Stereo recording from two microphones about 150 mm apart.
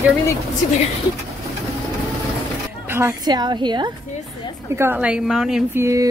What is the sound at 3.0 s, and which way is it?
Speech, 20° right (ahead or behind).